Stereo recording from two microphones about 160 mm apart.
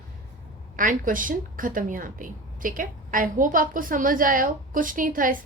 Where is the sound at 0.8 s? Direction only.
55° right (ahead or behind).